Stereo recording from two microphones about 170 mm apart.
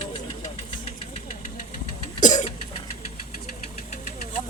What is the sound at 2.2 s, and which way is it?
Cough, 45° left (ahead or behind).